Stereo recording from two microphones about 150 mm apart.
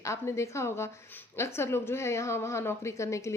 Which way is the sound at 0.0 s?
20° left (ahead or behind).